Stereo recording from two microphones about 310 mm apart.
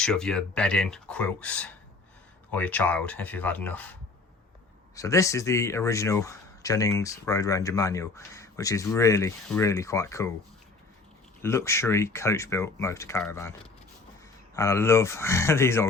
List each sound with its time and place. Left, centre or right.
0.0 s speech: centre
4.9 s speech: centre
11.4 s speech: centre
14.5 s speech: centre